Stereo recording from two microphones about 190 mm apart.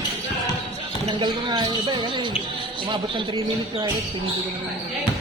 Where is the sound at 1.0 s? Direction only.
25° right (ahead or behind).